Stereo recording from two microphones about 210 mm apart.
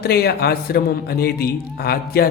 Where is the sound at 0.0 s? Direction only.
50° left (ahead or behind).